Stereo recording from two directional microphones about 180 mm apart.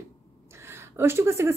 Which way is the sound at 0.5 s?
15° right (ahead or behind).